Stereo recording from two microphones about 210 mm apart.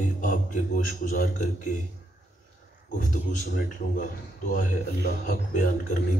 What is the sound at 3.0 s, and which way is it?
A man's voice, 40° left (ahead or behind).